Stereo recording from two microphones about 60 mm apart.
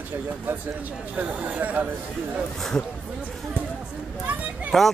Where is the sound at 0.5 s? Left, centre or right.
Right.